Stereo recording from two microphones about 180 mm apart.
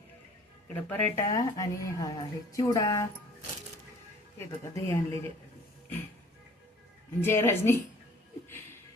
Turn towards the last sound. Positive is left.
turn(degrees=15)  # may be behind; listen again after turning